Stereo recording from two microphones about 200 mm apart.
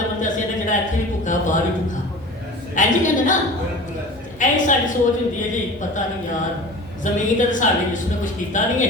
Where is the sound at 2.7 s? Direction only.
40° left (ahead or behind).